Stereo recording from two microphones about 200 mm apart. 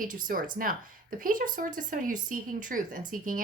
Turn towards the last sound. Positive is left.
turn(degrees=-40)  # may be behind; listen again after turning